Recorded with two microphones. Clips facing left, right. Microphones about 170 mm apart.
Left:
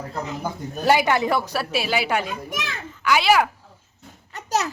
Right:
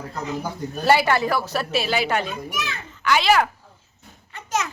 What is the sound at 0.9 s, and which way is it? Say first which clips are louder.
A woman's voice: even; 15° left (ahead or behind).